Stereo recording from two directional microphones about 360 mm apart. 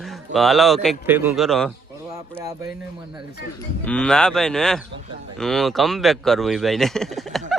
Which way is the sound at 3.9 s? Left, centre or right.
Centre.